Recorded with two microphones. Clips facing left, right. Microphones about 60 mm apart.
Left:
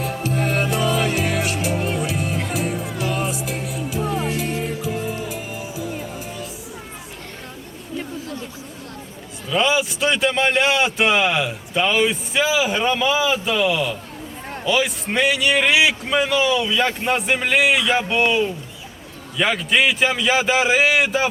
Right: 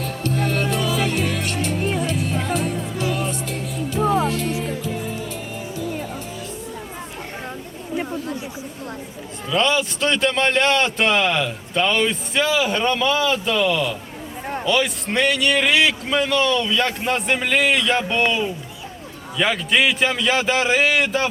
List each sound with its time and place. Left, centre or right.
0.0 s music: centre
4.3 s music: centre
9.5 s a man's voice: centre